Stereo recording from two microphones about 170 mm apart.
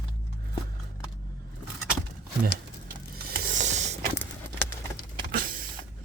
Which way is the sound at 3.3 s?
50° right (ahead or behind).